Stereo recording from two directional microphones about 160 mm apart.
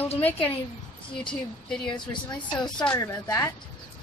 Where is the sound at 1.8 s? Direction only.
30° left (ahead or behind).